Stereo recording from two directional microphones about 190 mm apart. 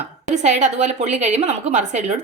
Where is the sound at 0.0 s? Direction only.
35° right (ahead or behind).